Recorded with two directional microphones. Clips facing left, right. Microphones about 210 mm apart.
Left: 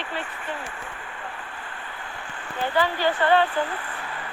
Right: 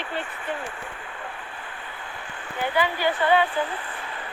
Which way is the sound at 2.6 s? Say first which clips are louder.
Left 1 dB; 15° right (ahead or behind).